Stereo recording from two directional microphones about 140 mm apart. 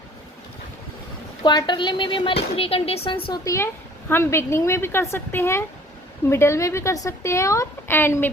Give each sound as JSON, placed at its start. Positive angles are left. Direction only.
{"t": 1.4, "sound": "speech", "side_deg": 30}
{"t": 3.4, "sound": "a woman's voice", "side_deg": 20}